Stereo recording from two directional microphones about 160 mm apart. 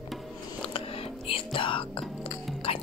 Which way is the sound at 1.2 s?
35° left (ahead or behind).